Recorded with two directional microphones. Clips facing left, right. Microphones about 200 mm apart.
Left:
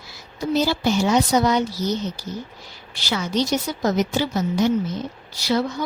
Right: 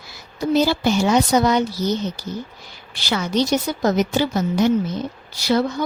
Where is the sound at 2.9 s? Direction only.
60° right (ahead or behind).